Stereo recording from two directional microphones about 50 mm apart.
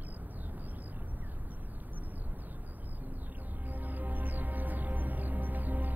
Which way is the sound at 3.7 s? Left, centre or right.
Right.